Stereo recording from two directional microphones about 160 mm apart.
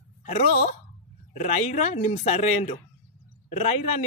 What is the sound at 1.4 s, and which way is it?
Speech, 45° left (ahead or behind).